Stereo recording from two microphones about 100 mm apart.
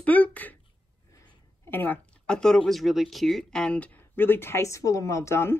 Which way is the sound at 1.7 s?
20° left (ahead or behind).